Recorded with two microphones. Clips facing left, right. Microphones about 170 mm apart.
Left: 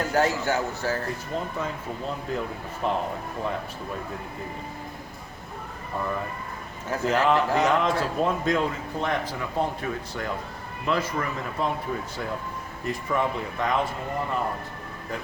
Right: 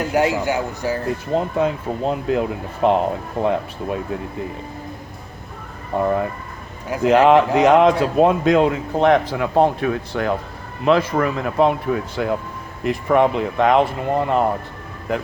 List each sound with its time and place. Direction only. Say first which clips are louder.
0.0 s a man's voice: right 5 dB; 15° right (ahead or behind)
1.3 s speech: right 13 dB; 70° right (ahead or behind)
5.9 s speech: right 11 dB; 65° right (ahead or behind)
7.1 s speech: right 9 dB; 65° right (ahead or behind)